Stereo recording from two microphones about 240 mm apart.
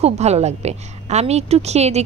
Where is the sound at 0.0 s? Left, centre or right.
Right.